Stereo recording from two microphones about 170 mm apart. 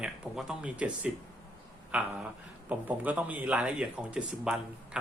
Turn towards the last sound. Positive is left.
turn(degrees=-5)  # may be behind; listen again after turning